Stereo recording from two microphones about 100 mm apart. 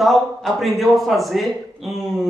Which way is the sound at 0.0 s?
Centre (ahead or behind).